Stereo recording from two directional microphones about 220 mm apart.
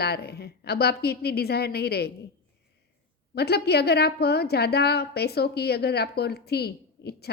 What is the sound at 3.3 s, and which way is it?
A woman's voice, 45° left (ahead or behind).